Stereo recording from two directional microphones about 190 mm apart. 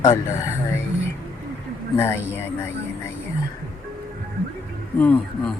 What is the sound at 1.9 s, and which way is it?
Speech, 15° left (ahead or behind).